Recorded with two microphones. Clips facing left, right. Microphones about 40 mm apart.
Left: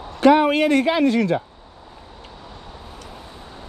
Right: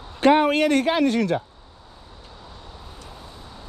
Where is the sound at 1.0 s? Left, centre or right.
Left.